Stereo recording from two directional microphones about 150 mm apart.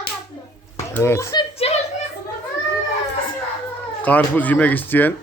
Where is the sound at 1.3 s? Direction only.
35° left (ahead or behind).